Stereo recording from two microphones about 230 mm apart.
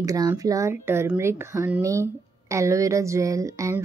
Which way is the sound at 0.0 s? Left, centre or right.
Centre.